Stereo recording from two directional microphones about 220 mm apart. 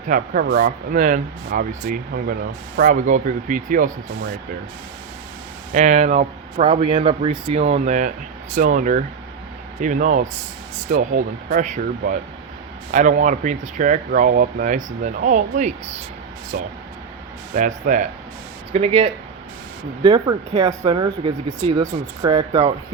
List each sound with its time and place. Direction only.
0.1 s speech: 40° right (ahead or behind)
5.7 s speech: 35° right (ahead or behind)
17.5 s speech: 35° right (ahead or behind)